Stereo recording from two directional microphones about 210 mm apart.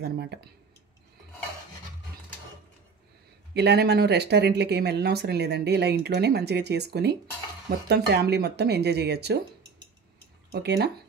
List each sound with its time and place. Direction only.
0.0 s speech: 50° right (ahead or behind)
3.5 s speech: 50° right (ahead or behind)
10.5 s speech: 50° right (ahead or behind)